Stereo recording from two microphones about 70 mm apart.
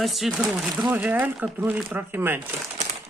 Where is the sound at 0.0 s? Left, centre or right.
Centre.